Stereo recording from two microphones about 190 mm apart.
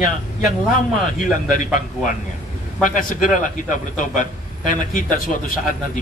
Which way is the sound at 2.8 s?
45° left (ahead or behind).